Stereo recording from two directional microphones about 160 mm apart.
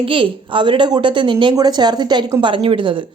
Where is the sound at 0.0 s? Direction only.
35° right (ahead or behind).